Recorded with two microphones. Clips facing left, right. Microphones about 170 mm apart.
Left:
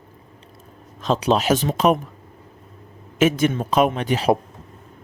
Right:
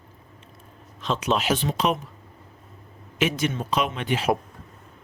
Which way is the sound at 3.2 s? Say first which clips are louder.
Left 7 dB; 50° left (ahead or behind).